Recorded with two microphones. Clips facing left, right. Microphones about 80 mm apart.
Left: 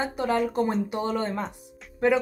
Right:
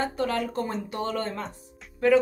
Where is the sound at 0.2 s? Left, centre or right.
Centre.